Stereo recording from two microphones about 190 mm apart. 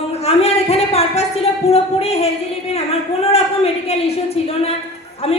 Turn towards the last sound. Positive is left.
turn(degrees=35)  # may be behind; listen again after turning